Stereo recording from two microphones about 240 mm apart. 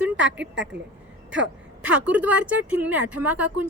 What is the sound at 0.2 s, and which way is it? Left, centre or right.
Speech, right.